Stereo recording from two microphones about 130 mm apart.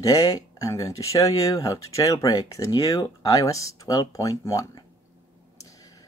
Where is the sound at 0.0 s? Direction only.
25° left (ahead or behind).